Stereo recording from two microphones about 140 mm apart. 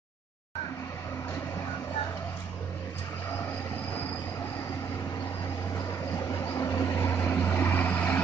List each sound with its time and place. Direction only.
6.1 s vehicle: 20° left (ahead or behind)